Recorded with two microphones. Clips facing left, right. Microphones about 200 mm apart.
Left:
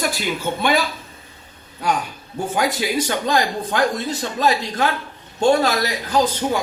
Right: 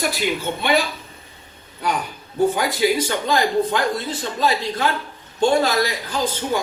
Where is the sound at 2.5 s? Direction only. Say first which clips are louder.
Right 1 dB; 50° left (ahead or behind).